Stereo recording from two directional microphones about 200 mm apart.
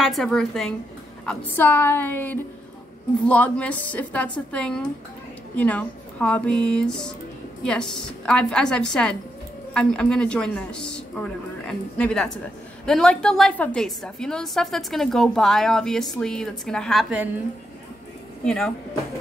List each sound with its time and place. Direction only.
0.0 s a woman's voice: centre (ahead or behind)
18.4 s speech: 5° left (ahead or behind)